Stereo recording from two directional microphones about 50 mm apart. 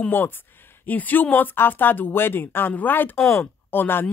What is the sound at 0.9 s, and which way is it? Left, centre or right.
A woman's voice, left.